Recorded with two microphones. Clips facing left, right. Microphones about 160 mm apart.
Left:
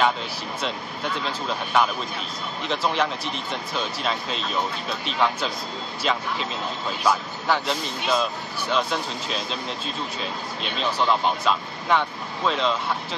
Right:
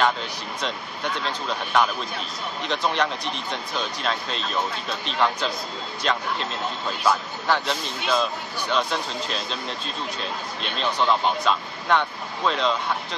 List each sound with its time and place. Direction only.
0.6 s speech: 5° left (ahead or behind)